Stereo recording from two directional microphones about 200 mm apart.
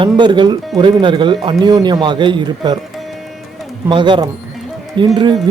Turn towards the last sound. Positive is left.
turn(degrees=-25)  # may be behind; listen again after turning